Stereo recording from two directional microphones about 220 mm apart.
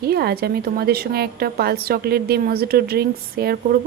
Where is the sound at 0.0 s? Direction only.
45° right (ahead or behind).